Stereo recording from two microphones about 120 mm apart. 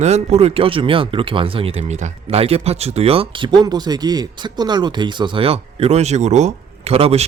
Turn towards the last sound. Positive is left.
turn(degrees=-55)  # may be behind; listen again after turning